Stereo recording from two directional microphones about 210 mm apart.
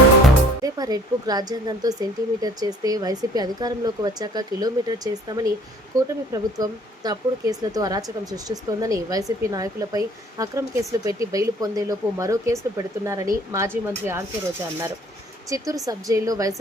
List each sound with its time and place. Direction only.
0.6 s speech: 20° right (ahead or behind)
15.4 s speech: 15° right (ahead or behind)